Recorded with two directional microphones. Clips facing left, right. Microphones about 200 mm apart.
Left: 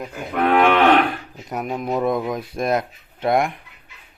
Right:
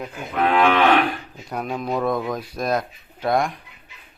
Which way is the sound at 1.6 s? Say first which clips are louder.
Left 2 dB; 15° left (ahead or behind).